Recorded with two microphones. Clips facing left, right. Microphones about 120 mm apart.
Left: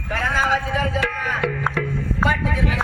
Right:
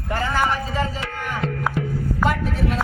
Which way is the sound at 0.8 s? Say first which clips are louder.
Left 3 dB; 70° left (ahead or behind).